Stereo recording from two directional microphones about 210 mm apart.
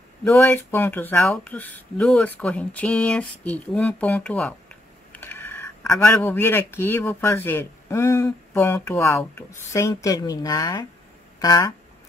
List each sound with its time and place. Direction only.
0.2 s speech: 10° left (ahead or behind)